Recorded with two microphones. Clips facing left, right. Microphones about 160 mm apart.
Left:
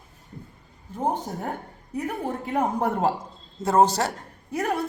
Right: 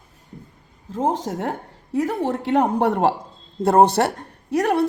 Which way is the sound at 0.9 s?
90° right.